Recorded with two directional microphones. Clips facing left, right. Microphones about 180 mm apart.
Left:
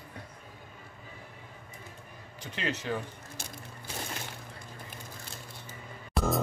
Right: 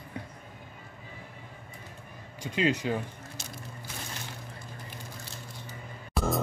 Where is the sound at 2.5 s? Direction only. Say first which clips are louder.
Right 7 dB; 15° right (ahead or behind).